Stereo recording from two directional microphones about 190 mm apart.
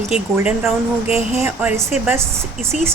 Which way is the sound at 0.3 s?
5° right (ahead or behind).